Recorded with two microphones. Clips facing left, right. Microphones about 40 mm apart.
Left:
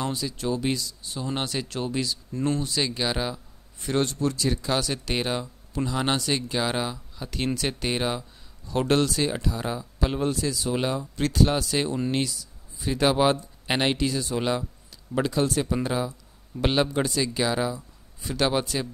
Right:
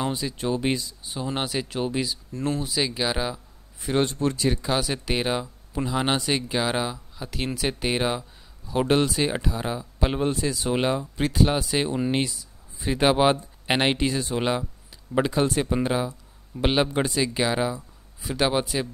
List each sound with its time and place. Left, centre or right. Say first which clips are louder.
0.0 s speech: right 2 dB; right
2.3 s speech: even; centre
3.8 s speech: right 2 dB; centre
4.6 s speech: right 1 dB; centre